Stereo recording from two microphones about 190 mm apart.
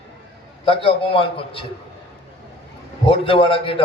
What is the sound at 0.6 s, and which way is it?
A man's voice, 30° left (ahead or behind).